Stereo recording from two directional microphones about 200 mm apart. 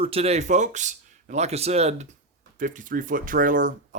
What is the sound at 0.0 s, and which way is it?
Speech, 30° right (ahead or behind).